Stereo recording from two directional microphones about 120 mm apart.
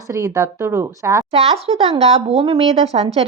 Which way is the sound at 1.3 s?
55° right (ahead or behind).